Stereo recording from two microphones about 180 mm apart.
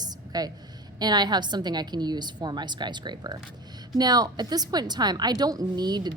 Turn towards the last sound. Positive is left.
turn(degrees=-25)  # may be behind; listen again after turning